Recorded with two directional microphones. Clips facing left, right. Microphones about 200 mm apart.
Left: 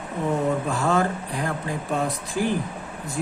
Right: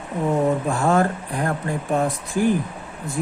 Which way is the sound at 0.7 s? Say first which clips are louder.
Right 3 dB; 50° right (ahead or behind).